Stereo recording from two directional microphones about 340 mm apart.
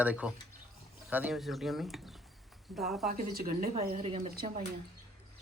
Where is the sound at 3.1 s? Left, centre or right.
Right.